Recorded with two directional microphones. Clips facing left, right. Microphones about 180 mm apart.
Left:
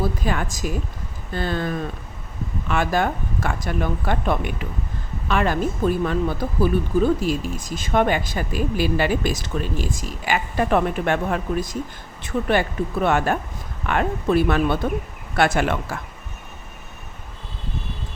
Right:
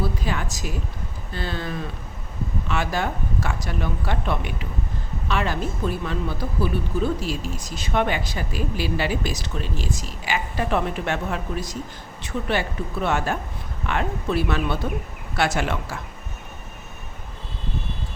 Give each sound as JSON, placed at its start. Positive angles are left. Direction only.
{"t": 0.0, "sound": "speech", "side_deg": 50}